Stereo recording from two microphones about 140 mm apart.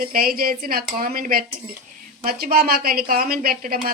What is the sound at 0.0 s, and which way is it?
Speech, 90° right.